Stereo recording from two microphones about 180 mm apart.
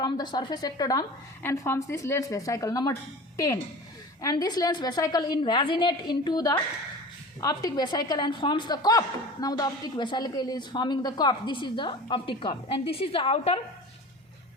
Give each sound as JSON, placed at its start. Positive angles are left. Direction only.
{"t": 0.0, "sound": "a woman's voice", "side_deg": 25}